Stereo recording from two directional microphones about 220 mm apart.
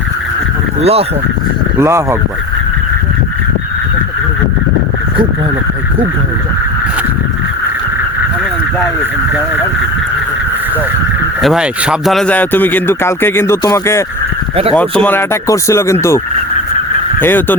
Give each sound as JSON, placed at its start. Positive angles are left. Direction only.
{"t": 0.8, "sound": "speech", "side_deg": -25}
{"t": 1.8, "sound": "speech", "side_deg": -10}
{"t": 11.4, "sound": "speech", "side_deg": -5}